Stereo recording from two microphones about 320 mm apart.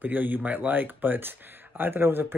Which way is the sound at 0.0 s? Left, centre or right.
Centre.